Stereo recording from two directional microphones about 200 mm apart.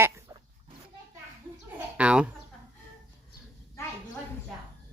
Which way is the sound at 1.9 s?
5° right (ahead or behind).